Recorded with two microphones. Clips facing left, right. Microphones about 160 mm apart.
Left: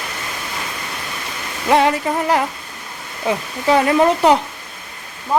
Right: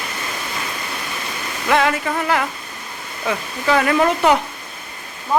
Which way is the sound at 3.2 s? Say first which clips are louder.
Left 3 dB; 30° left (ahead or behind).